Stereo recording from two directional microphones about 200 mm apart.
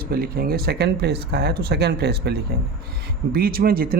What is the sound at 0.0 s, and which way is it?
Speech, 50° right (ahead or behind).